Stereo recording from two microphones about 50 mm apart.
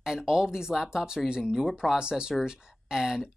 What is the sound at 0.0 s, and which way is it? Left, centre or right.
Speech, centre.